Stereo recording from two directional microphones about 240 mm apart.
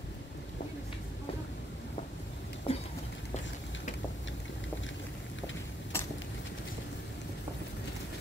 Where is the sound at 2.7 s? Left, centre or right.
Left.